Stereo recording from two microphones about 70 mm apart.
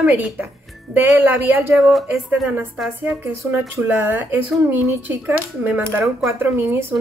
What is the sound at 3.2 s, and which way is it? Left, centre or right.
Speech, right.